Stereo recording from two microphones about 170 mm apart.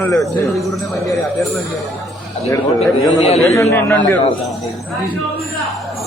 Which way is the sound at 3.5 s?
15° left (ahead or behind).